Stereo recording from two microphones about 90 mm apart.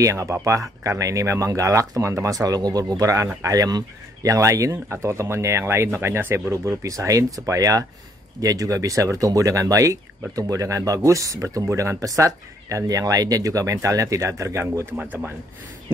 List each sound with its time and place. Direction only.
0.0 s speech: 35° right (ahead or behind)